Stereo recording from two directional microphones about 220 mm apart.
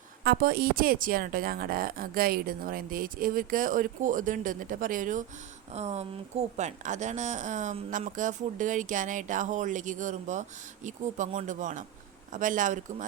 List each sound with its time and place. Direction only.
0.3 s a woman's voice: 40° right (ahead or behind)